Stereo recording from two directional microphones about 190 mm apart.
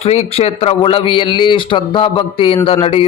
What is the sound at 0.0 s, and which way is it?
A man's voice, 35° left (ahead or behind).